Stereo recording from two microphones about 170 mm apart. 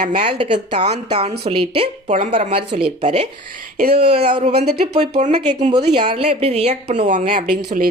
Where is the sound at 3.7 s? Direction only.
60° right (ahead or behind).